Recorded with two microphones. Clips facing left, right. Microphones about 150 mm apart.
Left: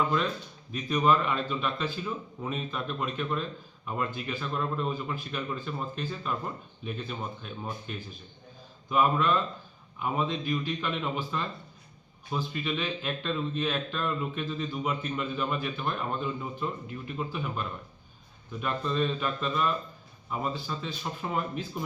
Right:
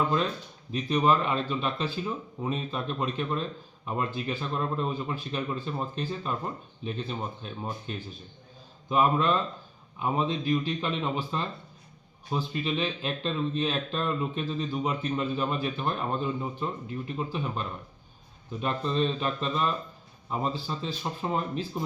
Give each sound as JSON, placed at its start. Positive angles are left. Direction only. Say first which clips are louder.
{"t": 0.9, "sound": "speech", "louder": "right 1 dB", "side_deg": -25}